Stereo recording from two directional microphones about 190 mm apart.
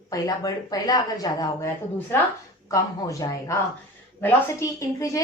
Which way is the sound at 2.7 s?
15° left (ahead or behind).